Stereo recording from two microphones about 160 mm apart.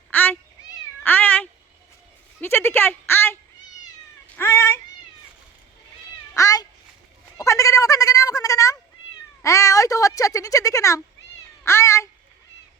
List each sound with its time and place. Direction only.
0.1 s cat: 10° left (ahead or behind)
2.4 s a woman's voice: 15° left (ahead or behind)
4.4 s cat: 15° left (ahead or behind)
6.3 s cat: 20° left (ahead or behind)
7.3 s fowl: 20° left (ahead or behind)
9.4 s a sound: 20° left (ahead or behind)
11.6 s cat: 15° left (ahead or behind)